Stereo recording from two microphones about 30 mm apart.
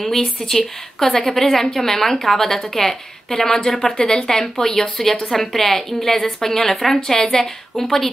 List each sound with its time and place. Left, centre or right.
0.0 s a woman's voice: centre
3.6 s a woman's voice: left